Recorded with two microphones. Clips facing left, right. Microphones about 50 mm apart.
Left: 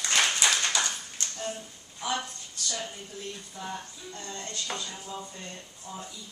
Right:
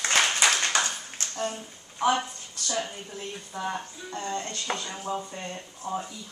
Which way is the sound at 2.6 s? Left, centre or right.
Right.